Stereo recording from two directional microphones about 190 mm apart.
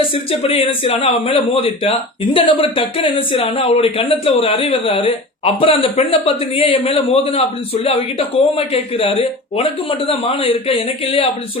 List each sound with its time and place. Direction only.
0.0 s speech: 30° left (ahead or behind)